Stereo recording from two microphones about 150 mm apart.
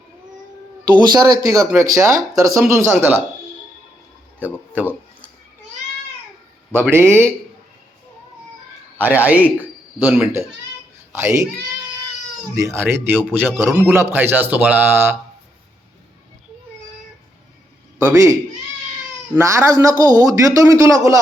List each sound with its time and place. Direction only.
0.9 s a man's voice: 25° right (ahead or behind)
4.7 s speech: 10° right (ahead or behind)
6.7 s speech: 15° right (ahead or behind)
9.0 s a man's voice: 10° right (ahead or behind)
12.5 s speech: 20° right (ahead or behind)
18.0 s a man's voice: 20° right (ahead or behind)
19.4 s a man's voice: 20° right (ahead or behind)